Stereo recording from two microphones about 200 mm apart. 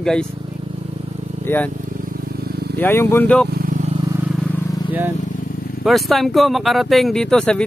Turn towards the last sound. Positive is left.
turn(degrees=5)  # may be behind; listen again after turning